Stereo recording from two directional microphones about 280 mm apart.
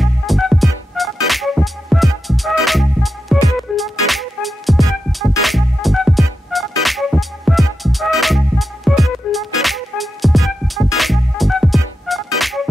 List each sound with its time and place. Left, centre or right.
0.0 s music: centre